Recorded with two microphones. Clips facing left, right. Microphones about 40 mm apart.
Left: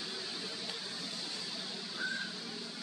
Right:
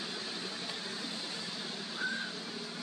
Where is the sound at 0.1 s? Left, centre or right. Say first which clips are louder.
Right 2 dB; centre.